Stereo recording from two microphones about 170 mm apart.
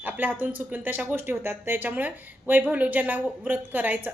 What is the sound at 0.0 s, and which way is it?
A woman's voice, 10° right (ahead or behind).